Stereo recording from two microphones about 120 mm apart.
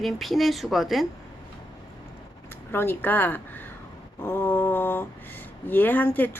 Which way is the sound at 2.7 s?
20° left (ahead or behind).